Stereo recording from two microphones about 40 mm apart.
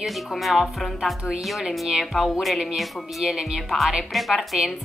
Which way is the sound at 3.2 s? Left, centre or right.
Centre.